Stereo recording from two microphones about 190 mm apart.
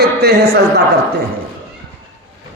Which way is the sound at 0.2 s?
55° right (ahead or behind).